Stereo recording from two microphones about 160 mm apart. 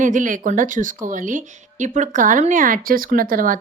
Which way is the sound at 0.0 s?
55° right (ahead or behind).